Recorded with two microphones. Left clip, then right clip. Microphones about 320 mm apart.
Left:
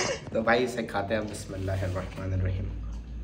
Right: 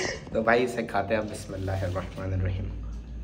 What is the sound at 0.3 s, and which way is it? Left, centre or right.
A man's voice, centre.